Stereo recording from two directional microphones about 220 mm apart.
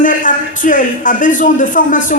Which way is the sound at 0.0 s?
35° left (ahead or behind).